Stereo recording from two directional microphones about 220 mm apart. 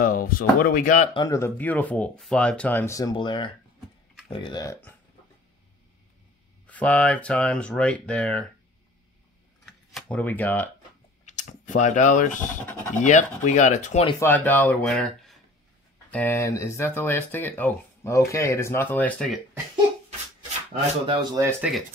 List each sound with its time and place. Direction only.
0.0 s speech: 40° left (ahead or behind)
1.1 s speech: 15° left (ahead or behind)
6.7 s speech: 5° left (ahead or behind)
9.7 s speech: 5° left (ahead or behind)
11.2 s speech: 35° left (ahead or behind)
14.2 s speech: 10° left (ahead or behind)
20.8 s speech: 20° right (ahead or behind); by 21.8 s 5° right (ahead or behind)